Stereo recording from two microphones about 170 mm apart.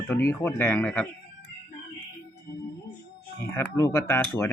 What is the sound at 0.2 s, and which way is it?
Speech, 15° left (ahead or behind).